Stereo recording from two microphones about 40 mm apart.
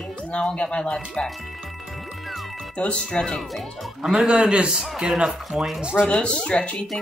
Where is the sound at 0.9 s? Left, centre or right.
Centre.